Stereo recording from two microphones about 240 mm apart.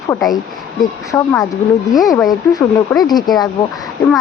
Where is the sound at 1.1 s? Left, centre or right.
Centre.